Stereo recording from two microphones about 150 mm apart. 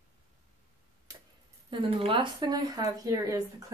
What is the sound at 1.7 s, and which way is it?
Speech, 30° right (ahead or behind).